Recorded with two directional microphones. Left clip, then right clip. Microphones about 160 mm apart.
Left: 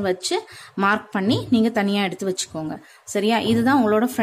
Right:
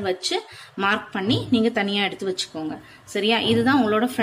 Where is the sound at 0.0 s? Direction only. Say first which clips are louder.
Left 2 dB; 60° left (ahead or behind).